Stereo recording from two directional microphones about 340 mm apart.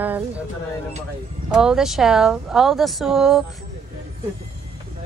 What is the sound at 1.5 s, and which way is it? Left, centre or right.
Speech, centre.